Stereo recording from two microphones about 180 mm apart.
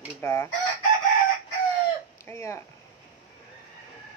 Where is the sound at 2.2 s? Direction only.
15° left (ahead or behind).